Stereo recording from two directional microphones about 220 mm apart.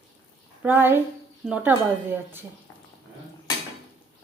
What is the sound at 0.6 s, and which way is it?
A woman's voice, 10° right (ahead or behind).